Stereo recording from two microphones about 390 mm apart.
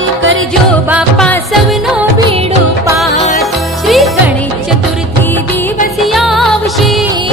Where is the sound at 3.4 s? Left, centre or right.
Centre.